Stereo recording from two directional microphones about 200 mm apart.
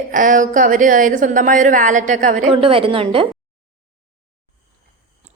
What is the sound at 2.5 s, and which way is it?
Speech, 25° right (ahead or behind).